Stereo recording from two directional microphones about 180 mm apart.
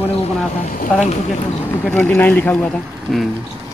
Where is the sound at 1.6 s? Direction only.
10° left (ahead or behind).